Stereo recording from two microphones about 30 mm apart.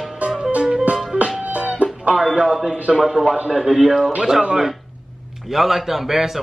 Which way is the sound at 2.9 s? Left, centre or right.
Centre.